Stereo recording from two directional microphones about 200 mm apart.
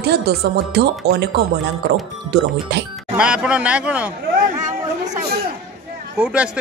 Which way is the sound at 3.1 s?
5° right (ahead or behind).